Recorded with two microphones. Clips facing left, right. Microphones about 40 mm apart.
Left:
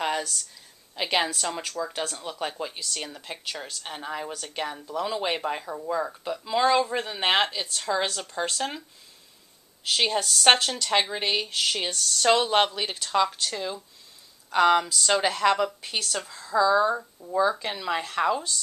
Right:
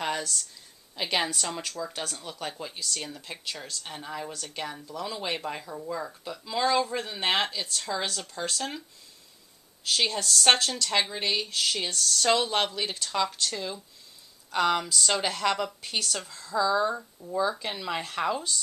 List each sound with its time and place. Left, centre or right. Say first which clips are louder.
0.0 s a sound: left 3 dB; centre
0.9 s speech: left 3 dB; centre
9.8 s speech: left 2 dB; centre